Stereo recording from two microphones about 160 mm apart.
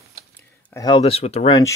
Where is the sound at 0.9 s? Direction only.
35° left (ahead or behind).